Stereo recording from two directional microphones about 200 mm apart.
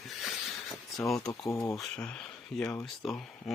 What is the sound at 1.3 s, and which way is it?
Speech, 15° left (ahead or behind).